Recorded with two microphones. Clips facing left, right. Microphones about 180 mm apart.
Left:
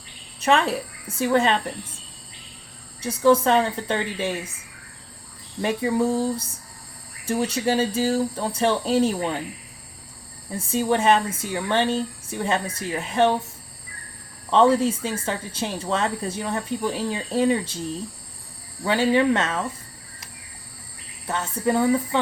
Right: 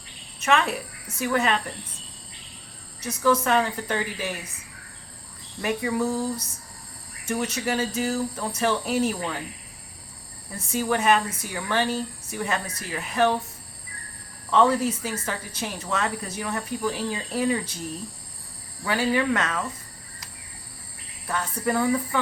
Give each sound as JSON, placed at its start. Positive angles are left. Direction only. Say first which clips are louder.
{"t": 0.3, "sound": "a woman's voice", "louder": "left 3 dB", "side_deg": 30}
{"t": 3.0, "sound": "speech", "louder": "left 5 dB", "side_deg": 30}
{"t": 5.6, "sound": "speech", "louder": "left 3 dB", "side_deg": 30}
{"t": 10.5, "sound": "speech", "louder": "left 3 dB", "side_deg": 30}
{"t": 14.5, "sound": "speech", "louder": "left 3 dB", "side_deg": 30}
{"t": 18.9, "sound": "speech", "louder": "left 4 dB", "side_deg": 25}
{"t": 21.2, "sound": "speech", "louder": "left 3 dB", "side_deg": 25}